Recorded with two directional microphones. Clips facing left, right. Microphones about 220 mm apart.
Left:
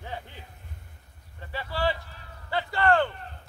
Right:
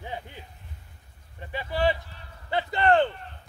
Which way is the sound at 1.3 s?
20° right (ahead or behind).